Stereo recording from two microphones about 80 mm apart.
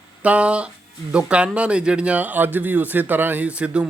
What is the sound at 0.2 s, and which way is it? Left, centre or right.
A man's voice, centre.